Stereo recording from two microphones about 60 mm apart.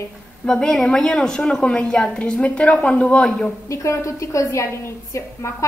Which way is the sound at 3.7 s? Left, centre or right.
Left.